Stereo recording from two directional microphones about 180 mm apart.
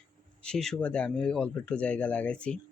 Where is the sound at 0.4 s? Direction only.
5° left (ahead or behind).